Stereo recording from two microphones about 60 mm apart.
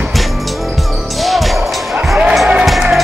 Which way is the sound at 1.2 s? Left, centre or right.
Centre.